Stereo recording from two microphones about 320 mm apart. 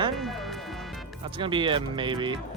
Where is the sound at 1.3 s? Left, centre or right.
Centre.